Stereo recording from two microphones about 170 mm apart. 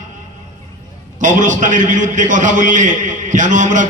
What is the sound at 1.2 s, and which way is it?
A man's voice, 50° right (ahead or behind).